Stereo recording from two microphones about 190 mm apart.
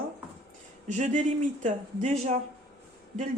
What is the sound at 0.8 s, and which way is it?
Speech, 40° right (ahead or behind).